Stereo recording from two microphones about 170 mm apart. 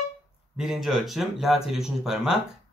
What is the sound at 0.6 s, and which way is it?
Speech, centre (ahead or behind).